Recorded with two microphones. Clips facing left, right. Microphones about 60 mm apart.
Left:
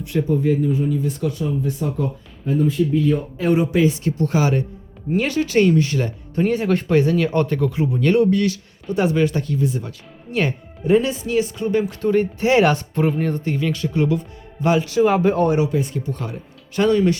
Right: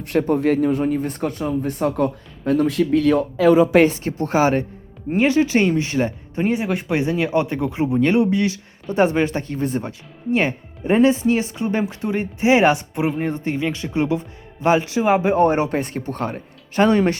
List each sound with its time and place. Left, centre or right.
0.0 s speech: right
3.8 s speech: right
10.3 s speech: right
15.4 s speech: right